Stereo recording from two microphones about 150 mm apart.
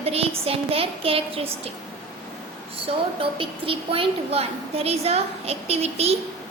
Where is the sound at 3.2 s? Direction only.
35° right (ahead or behind).